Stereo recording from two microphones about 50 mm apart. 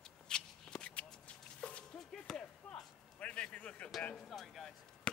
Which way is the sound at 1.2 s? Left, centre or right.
Left.